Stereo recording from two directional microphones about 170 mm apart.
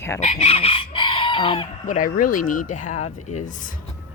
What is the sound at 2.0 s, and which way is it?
Speech, 55° left (ahead or behind).